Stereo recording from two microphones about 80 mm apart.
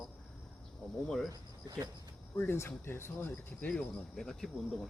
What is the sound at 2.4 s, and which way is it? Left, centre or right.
Speech, left.